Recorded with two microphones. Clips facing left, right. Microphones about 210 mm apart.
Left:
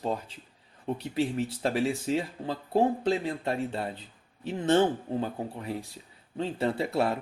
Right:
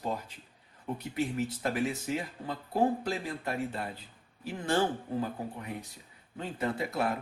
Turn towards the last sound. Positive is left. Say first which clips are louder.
# left 4 dB
turn(degrees=30)  # may be behind; listen again after turning